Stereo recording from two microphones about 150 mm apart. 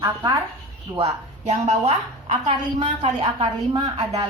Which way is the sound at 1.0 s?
50° right (ahead or behind).